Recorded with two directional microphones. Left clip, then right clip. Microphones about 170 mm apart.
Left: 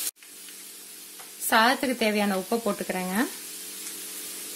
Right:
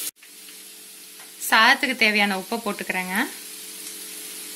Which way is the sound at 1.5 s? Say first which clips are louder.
Right 5 dB; 30° left (ahead or behind).